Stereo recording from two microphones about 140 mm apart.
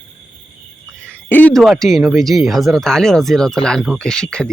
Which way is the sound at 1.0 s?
10° left (ahead or behind).